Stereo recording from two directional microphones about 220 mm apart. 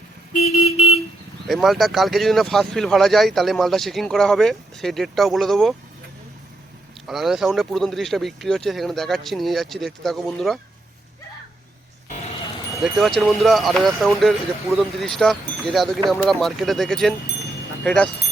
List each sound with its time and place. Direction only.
0.3 s vehicle: 30° left (ahead or behind)
1.5 s speech: centre (ahead or behind)
7.1 s speech: centre (ahead or behind)
12.8 s speech: centre (ahead or behind)